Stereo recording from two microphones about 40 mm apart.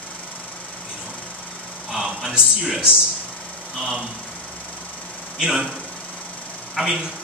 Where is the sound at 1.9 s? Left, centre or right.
Centre.